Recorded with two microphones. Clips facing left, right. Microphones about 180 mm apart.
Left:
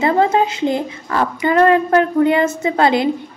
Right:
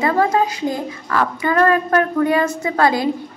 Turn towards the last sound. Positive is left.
turn(degrees=25)  # may be behind; listen again after turning